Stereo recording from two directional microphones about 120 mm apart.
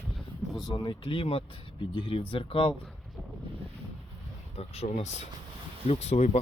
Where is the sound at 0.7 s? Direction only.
45° left (ahead or behind).